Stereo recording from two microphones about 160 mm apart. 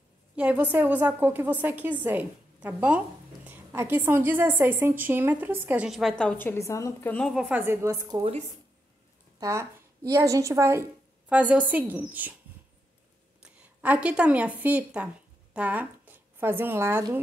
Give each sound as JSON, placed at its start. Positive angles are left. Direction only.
{"t": 0.4, "sound": "a woman's voice", "side_deg": -10}
{"t": 7.2, "sound": "a woman's voice", "side_deg": 0}
{"t": 7.6, "sound": "a woman's voice", "side_deg": -15}
{"t": 8.2, "sound": "speech", "side_deg": -40}
{"t": 9.4, "sound": "a woman's voice", "side_deg": -20}
{"t": 13.4, "sound": "a woman's voice", "side_deg": -10}